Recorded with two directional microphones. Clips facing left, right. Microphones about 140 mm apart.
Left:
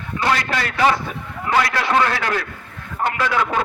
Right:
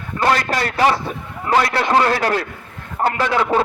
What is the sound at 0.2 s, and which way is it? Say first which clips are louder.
A man's voice: right 3 dB; 40° right (ahead or behind).